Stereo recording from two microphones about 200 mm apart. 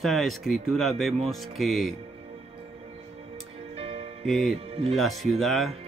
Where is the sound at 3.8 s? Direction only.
30° right (ahead or behind).